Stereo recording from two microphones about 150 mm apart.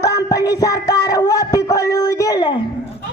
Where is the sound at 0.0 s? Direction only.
25° left (ahead or behind).